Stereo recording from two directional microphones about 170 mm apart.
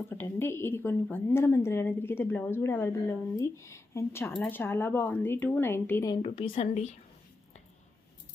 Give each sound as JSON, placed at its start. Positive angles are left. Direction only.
{"t": 0.1, "sound": "a woman's voice", "side_deg": 15}
{"t": 6.1, "sound": "speech", "side_deg": 30}